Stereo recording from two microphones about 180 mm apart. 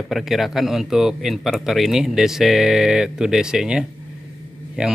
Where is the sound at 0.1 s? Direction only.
Centre (ahead or behind).